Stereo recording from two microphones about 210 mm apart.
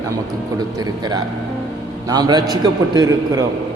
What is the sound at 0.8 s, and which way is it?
A man's voice, 20° right (ahead or behind).